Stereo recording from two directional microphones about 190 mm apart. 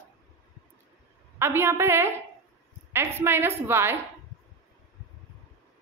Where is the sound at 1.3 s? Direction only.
15° right (ahead or behind).